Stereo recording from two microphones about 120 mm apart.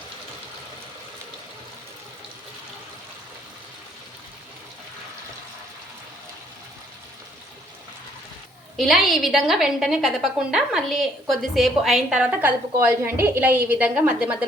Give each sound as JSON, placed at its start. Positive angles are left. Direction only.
{"t": 8.7, "sound": "a woman's voice", "side_deg": 0}